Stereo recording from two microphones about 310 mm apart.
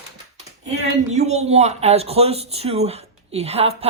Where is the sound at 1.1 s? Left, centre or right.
Right.